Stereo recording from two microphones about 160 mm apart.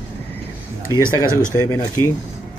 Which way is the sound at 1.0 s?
15° right (ahead or behind).